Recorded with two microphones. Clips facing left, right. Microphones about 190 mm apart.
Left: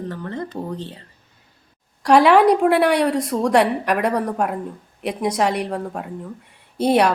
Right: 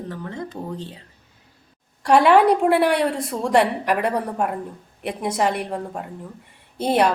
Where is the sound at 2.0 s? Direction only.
65° left (ahead or behind).